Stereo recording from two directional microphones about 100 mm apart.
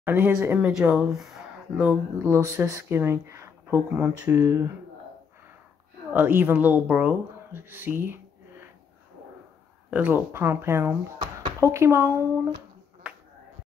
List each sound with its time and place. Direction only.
0.0 s speech: 20° right (ahead or behind)
2.2 s speech: 25° right (ahead or behind)
6.1 s speech: 20° right (ahead or behind)
9.8 s speech: 15° right (ahead or behind)